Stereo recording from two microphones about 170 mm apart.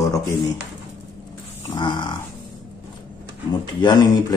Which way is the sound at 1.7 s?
25° left (ahead or behind).